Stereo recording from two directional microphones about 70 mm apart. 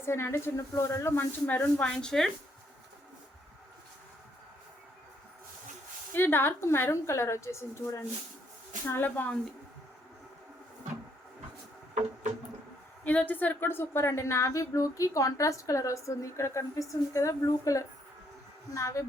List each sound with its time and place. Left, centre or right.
0.0 s a woman's voice: left
1.8 s speech: centre
6.1 s a woman's voice: left
8.9 s a woman's voice: left
13.1 s a woman's voice: left